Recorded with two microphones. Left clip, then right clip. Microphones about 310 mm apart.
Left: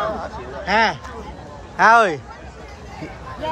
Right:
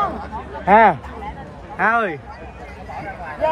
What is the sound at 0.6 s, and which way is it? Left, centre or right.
Speech, centre.